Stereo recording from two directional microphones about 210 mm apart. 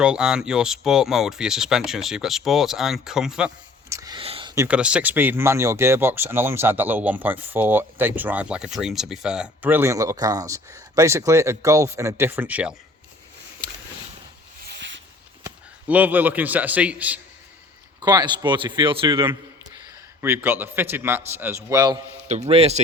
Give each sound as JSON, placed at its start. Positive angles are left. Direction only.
{"t": 0.0, "sound": "speech", "side_deg": -5}
{"t": 4.5, "sound": "speech", "side_deg": -10}
{"t": 14.7, "sound": "a sound", "side_deg": -60}
{"t": 15.4, "sound": "a man's voice", "side_deg": -10}
{"t": 18.0, "sound": "a man's voice", "side_deg": -20}
{"t": 20.2, "sound": "speech", "side_deg": -10}
{"t": 22.3, "sound": "a man's voice", "side_deg": -30}